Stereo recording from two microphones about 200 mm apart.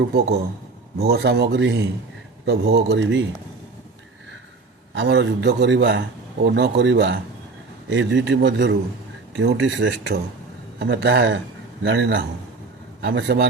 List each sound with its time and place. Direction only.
0.9 s a man's voice: 55° right (ahead or behind)
4.9 s a man's voice: 60° right (ahead or behind)